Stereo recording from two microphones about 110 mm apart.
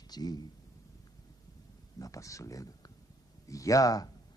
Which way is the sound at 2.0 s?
30° left (ahead or behind).